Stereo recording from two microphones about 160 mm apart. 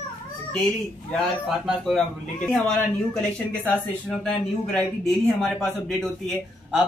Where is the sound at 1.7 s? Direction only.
Centre (ahead or behind).